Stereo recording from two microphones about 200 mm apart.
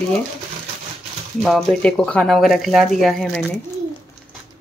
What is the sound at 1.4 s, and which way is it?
Speech, centre (ahead or behind).